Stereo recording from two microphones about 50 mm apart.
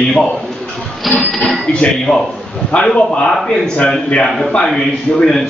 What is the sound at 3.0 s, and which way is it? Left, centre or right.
A man's voice, centre.